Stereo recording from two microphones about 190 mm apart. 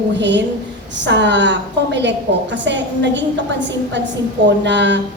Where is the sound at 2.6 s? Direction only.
70° right (ahead or behind).